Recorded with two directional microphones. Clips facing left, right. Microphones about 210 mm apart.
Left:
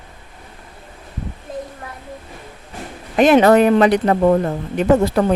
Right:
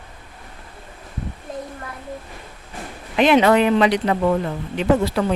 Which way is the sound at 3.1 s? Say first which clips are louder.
Left 4 dB; 45° left (ahead or behind).